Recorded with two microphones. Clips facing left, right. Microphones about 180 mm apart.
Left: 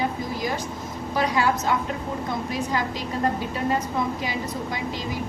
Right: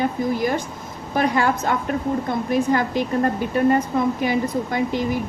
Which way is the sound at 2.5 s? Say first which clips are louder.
Right 11 dB; 55° right (ahead or behind).